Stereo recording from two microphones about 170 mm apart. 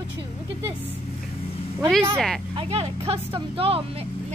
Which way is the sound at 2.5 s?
35° right (ahead or behind).